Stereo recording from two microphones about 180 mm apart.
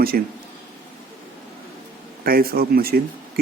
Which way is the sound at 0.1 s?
55° right (ahead or behind).